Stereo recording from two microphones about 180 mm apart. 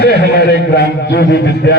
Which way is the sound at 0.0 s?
65° left (ahead or behind).